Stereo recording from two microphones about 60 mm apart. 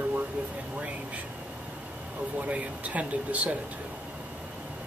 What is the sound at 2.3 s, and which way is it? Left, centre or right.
Speech, right.